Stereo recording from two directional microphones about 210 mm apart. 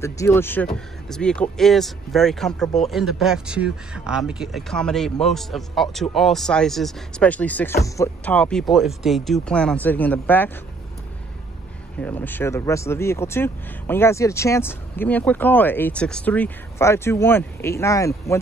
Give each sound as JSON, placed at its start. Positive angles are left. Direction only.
{"t": 0.0, "sound": "speech", "side_deg": 10}
{"t": 12.0, "sound": "speech", "side_deg": 10}